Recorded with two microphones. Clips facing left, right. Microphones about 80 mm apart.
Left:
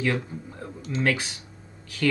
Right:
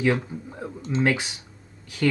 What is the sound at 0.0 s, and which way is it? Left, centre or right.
Speech, centre.